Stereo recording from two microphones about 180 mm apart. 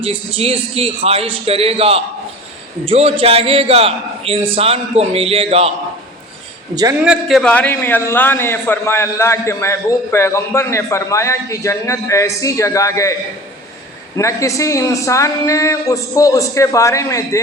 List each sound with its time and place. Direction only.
0.0 s a man's voice: 30° right (ahead or behind)
7.0 s a man's voice: centre (ahead or behind); by 13.1 s 15° left (ahead or behind)
14.2 s a man's voice: 15° left (ahead or behind)